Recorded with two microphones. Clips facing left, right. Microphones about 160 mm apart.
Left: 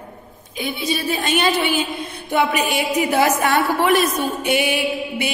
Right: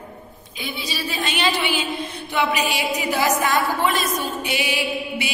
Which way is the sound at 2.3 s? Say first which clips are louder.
Left 3 dB; 50° left (ahead or behind).